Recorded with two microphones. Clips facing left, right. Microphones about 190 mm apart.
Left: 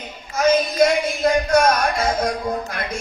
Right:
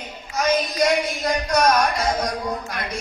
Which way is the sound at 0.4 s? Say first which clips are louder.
Left 4 dB; 50° left (ahead or behind).